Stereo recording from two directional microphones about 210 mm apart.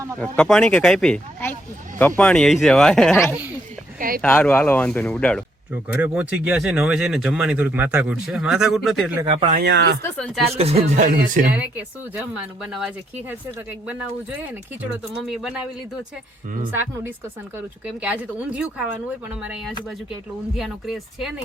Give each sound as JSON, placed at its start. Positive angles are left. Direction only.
{"t": 0.2, "sound": "speech", "side_deg": 5}
{"t": 4.2, "sound": "speech", "side_deg": 5}
{"t": 5.7, "sound": "speech", "side_deg": -5}
{"t": 9.3, "sound": "speech", "side_deg": -25}
{"t": 9.6, "sound": "speech", "side_deg": -50}
{"t": 10.0, "sound": "speech", "side_deg": 5}
{"t": 10.5, "sound": "speech", "side_deg": -30}
{"t": 12.6, "sound": "speech", "side_deg": -5}
{"t": 18.0, "sound": "speech", "side_deg": -5}
{"t": 20.6, "sound": "speech", "side_deg": 0}